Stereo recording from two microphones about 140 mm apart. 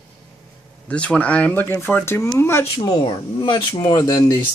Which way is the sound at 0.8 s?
10° left (ahead or behind).